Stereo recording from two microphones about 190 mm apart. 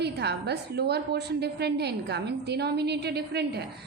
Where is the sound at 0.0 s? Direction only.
60° right (ahead or behind).